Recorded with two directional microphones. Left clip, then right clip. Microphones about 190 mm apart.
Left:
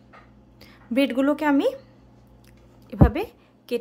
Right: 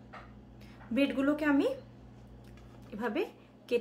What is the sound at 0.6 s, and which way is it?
A woman's voice, 55° left (ahead or behind).